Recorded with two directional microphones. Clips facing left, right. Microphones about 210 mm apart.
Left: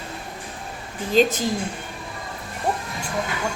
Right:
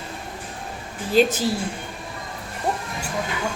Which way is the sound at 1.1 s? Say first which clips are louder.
Even; 10° right (ahead or behind).